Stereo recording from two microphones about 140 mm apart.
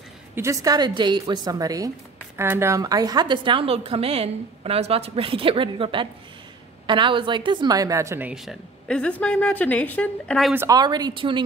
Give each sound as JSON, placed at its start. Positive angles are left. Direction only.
{"t": 0.4, "sound": "a woman's voice", "side_deg": -25}
{"t": 8.3, "sound": "a woman's voice", "side_deg": 0}
{"t": 10.5, "sound": "a woman's voice", "side_deg": -15}
{"t": 10.8, "sound": "a woman's voice", "side_deg": -30}